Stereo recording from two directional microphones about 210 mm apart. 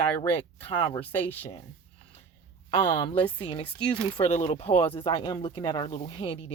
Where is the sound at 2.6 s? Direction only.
25° left (ahead or behind).